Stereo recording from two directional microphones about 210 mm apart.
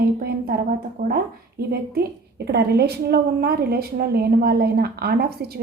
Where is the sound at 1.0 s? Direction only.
45° right (ahead or behind).